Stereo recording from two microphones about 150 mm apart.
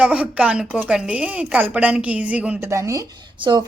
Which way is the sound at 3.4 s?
35° right (ahead or behind).